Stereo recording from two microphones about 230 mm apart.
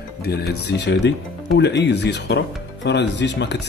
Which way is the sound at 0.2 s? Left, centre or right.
Left.